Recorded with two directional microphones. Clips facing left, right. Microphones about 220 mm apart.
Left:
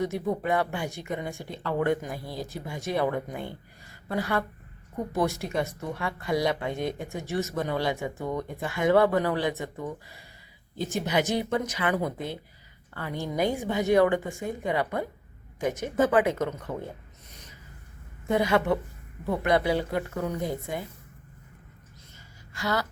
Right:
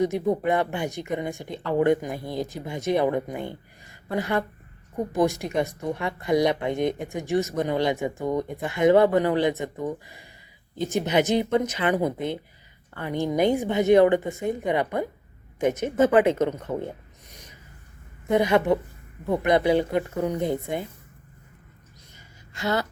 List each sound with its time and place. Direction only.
0.0 s speech: 20° right (ahead or behind)
18.3 s speech: 20° right (ahead or behind)
22.1 s a sound: 25° right (ahead or behind)